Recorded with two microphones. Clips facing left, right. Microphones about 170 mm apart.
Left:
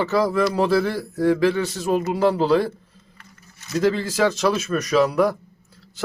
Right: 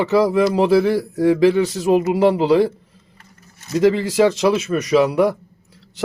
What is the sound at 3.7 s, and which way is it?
Speech, 15° right (ahead or behind).